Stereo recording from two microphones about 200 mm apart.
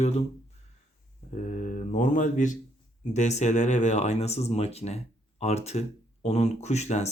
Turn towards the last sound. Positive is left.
turn(degrees=35)  # may be behind; listen again after turning